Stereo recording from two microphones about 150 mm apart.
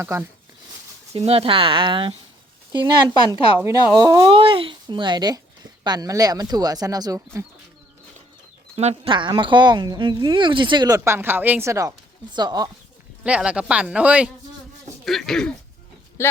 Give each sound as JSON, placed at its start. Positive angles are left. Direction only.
{"t": 0.0, "sound": "speech", "side_deg": -15}
{"t": 1.1, "sound": "speech", "side_deg": -40}
{"t": 3.6, "sound": "speech", "side_deg": -25}
{"t": 4.3, "sound": "speech", "side_deg": -35}
{"t": 8.7, "sound": "speech", "side_deg": -45}
{"t": 9.1, "sound": "speech", "side_deg": -35}
{"t": 13.2, "sound": "speech", "side_deg": -10}
{"t": 16.2, "sound": "speech", "side_deg": 15}